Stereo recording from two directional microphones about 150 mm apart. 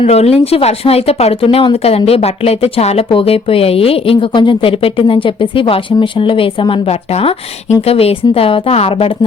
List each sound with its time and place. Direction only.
0.0 s speech: 45° left (ahead or behind)